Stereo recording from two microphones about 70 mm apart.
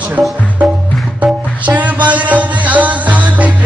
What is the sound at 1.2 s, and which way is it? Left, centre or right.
Music, right.